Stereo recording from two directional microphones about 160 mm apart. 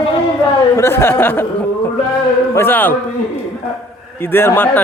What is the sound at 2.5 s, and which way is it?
Speech, 15° left (ahead or behind).